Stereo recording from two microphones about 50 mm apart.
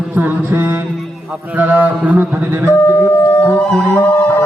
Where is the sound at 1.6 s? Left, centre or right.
Right.